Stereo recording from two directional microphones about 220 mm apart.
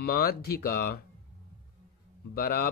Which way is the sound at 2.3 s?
45° left (ahead or behind).